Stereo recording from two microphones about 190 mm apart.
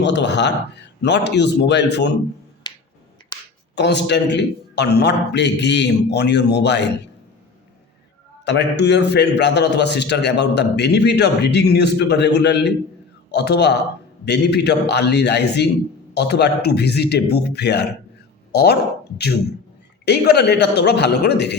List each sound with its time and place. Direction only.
0.0 s a man's voice: 65° left (ahead or behind)
2.6 s finger snapping: 20° left (ahead or behind)
3.8 s a man's voice: 65° left (ahead or behind)
8.4 s a man's voice: 65° left (ahead or behind)